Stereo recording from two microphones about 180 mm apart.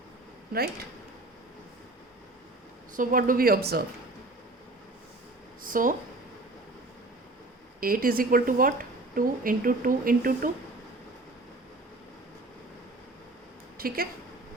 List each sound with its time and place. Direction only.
2.9 s speech: 50° right (ahead or behind)
5.6 s speech: 50° right (ahead or behind)
7.8 s speech: 55° right (ahead or behind)
13.7 s a woman's voice: 55° right (ahead or behind)